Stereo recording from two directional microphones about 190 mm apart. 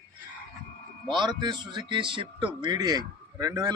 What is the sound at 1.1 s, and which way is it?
Speech, 25° right (ahead or behind).